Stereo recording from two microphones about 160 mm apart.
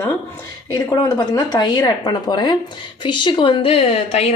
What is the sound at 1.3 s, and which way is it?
A woman's voice, 25° left (ahead or behind).